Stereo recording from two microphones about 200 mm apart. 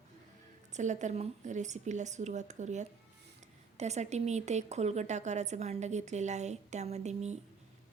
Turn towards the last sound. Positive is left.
turn(degrees=-35)  # may be behind; listen again after turning